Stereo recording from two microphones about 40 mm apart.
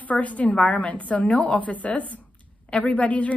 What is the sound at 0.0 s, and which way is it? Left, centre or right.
A woman's voice, left.